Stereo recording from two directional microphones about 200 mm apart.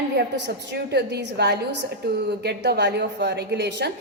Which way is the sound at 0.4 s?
55° right (ahead or behind).